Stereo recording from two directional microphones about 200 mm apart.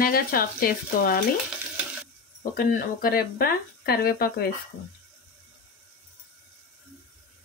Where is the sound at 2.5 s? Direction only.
45° left (ahead or behind).